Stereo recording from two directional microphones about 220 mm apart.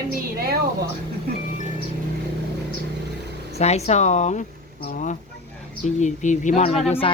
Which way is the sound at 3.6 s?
30° left (ahead or behind).